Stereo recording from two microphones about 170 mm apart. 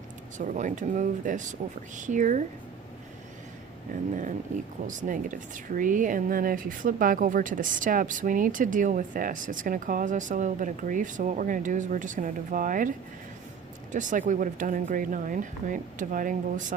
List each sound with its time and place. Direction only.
0.3 s speech: 45° right (ahead or behind)
4.1 s speech: 50° right (ahead or behind)
13.9 s speech: 50° right (ahead or behind)